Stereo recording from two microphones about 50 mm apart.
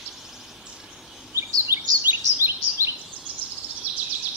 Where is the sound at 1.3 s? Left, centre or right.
Right.